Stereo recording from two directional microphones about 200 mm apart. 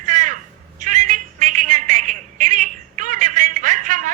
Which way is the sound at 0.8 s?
40° right (ahead or behind).